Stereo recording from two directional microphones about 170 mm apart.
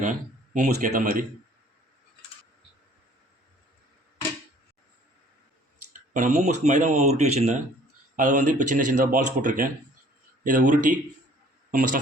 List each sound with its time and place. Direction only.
0.0 s speech: 50° right (ahead or behind)
6.1 s speech: 45° right (ahead or behind)